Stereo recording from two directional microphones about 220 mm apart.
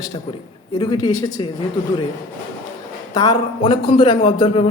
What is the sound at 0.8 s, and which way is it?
Speech, 20° left (ahead or behind).